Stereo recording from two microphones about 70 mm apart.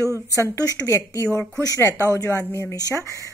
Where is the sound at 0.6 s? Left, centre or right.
Left.